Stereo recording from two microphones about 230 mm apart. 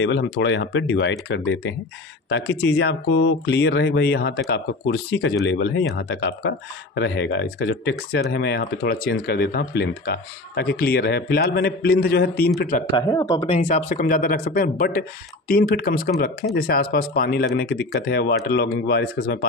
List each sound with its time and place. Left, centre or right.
0.0 s speech: left
12.9 s speech: centre
13.6 s speech: left